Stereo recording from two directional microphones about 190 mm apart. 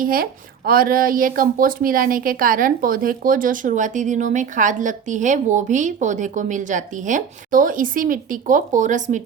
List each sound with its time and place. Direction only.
0.0 s speech: 50° right (ahead or behind)